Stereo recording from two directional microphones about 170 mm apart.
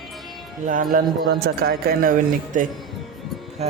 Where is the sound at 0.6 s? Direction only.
50° right (ahead or behind).